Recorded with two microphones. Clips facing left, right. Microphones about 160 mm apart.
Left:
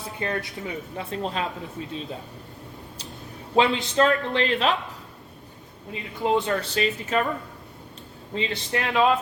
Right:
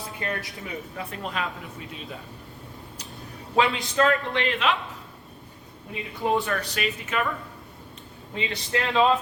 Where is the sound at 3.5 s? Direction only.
25° left (ahead or behind).